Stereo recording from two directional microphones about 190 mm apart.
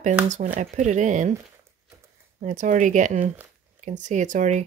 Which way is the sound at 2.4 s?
40° right (ahead or behind).